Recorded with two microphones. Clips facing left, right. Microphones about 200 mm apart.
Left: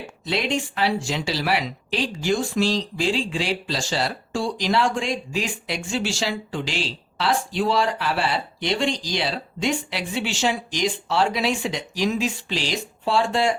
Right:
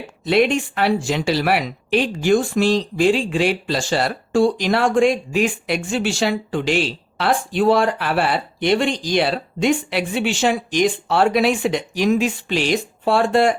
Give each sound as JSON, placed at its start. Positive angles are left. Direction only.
{"t": 0.3, "sound": "speech", "side_deg": -55}